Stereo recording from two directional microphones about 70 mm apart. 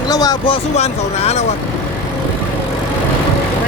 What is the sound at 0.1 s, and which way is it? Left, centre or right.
Speech, left.